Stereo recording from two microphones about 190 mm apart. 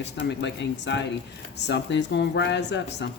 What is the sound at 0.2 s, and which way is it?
Speech, 70° left (ahead or behind).